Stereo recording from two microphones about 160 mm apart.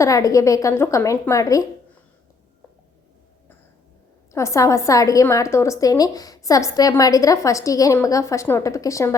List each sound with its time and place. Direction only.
0.0 s a woman's voice: 20° left (ahead or behind)
4.3 s a woman's voice: 20° left (ahead or behind)